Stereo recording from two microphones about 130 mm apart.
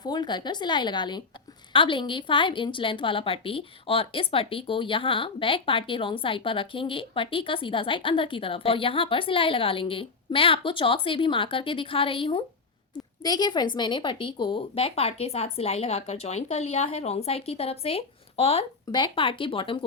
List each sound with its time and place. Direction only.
0.0 s a woman's voice: 35° left (ahead or behind); by 18.6 s 50° left (ahead or behind)
18.9 s a woman's voice: 35° left (ahead or behind)